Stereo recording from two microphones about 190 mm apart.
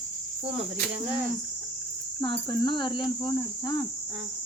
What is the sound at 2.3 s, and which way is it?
Cricket, 25° left (ahead or behind).